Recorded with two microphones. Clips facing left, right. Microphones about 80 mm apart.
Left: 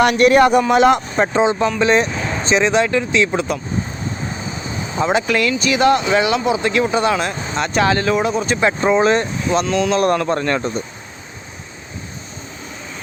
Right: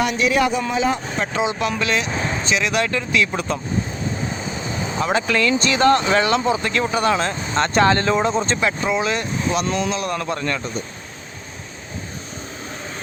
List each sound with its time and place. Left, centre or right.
0.0 s speech: left
0.7 s speech: left
1.4 s speech: left
2.8 s speech: centre
4.9 s speech: centre
8.6 s speech: left
9.9 s speech: left